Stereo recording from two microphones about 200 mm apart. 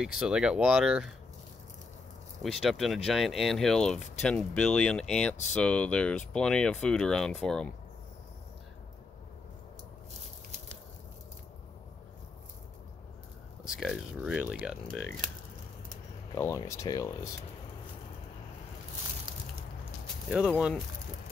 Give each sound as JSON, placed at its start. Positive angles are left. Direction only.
{"t": 0.0, "sound": "speech", "side_deg": -5}
{"t": 2.4, "sound": "speech", "side_deg": 0}
{"t": 13.7, "sound": "speech", "side_deg": 0}
{"t": 16.3, "sound": "speech", "side_deg": 15}
{"t": 19.3, "sound": "a sound", "side_deg": -20}
{"t": 20.2, "sound": "speech", "side_deg": -5}